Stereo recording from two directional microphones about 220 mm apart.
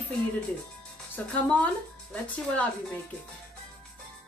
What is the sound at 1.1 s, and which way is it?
Speech, 5° left (ahead or behind).